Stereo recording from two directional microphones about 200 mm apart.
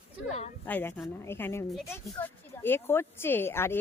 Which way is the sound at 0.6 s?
10° left (ahead or behind).